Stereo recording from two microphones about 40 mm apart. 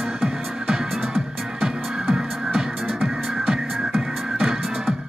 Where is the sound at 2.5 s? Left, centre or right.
Centre.